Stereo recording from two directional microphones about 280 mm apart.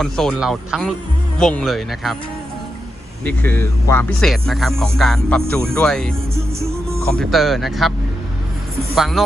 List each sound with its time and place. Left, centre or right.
0.0 s speech: centre
3.2 s speech: centre
9.0 s speech: centre